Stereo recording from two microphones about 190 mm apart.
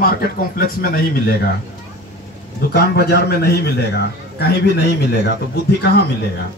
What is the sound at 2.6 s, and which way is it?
A man's voice, 55° left (ahead or behind).